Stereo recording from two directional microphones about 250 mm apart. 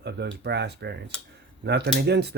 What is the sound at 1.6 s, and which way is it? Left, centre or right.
Speech, right.